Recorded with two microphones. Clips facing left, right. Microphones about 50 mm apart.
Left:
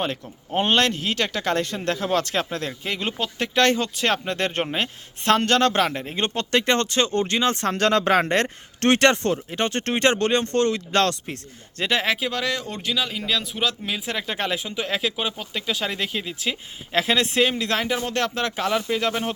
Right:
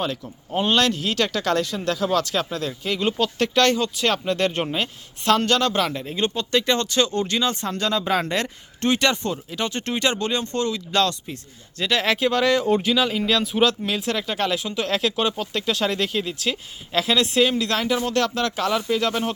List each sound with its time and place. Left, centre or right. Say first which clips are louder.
0.0 s speech: even; left
7.5 s speech: left 4 dB; left
8.8 s speech: left 3 dB; left
11.8 s speech: even; left
12.0 s speech: right 4 dB; centre
13.8 s speech: right 3 dB; centre
14.1 s speech: right 2 dB; left
16.9 s speech: right 1 dB; left